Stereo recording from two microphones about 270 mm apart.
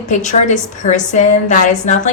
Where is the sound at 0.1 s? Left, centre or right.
Left.